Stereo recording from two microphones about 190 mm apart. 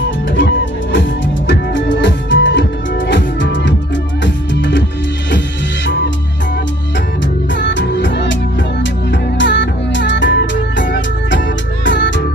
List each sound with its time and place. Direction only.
0.4 s music: 70° left (ahead or behind)
7.5 s music: 70° left (ahead or behind)